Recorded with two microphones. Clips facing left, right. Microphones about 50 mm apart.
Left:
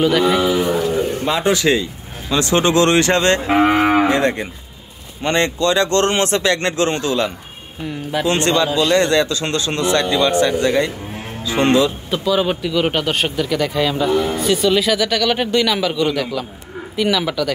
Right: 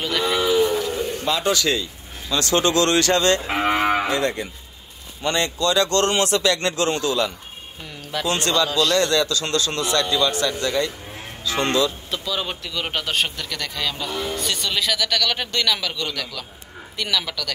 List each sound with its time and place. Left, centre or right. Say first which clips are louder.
0.0 s speech: left 8 dB; centre
0.5 s a sound: left 1 dB; left
1.2 s a man's voice: left 3 dB; left
7.8 s speech: left 7 dB; centre
8.6 s speech: left 4 dB; centre
12.1 s speech: left 9 dB; centre